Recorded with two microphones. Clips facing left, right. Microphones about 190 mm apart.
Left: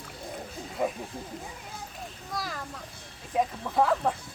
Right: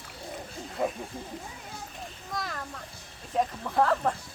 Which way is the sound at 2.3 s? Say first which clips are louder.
Even; centre (ahead or behind).